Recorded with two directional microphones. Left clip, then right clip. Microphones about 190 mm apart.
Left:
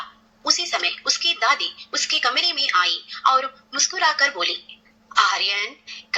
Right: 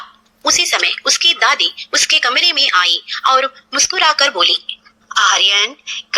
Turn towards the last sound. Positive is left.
turn(degrees=0)  # may be behind; listen again after turning